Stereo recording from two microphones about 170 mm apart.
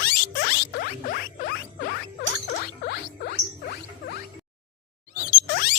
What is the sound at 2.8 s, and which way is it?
Rodents, 65° left (ahead or behind).